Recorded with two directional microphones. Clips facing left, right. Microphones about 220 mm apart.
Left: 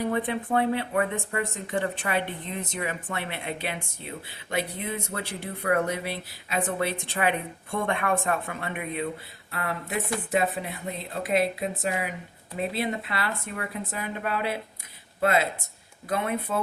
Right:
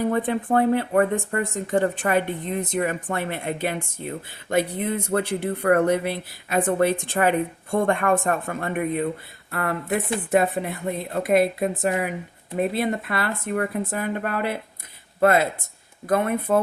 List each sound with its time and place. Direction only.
0.1 s speech: 45° right (ahead or behind)